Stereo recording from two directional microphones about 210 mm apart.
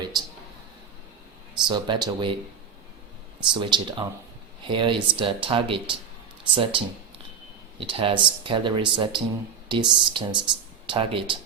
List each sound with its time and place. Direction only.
0.1 s a sound: 20° right (ahead or behind)
1.6 s speech: 20° right (ahead or behind)
3.5 s speech: 20° right (ahead or behind)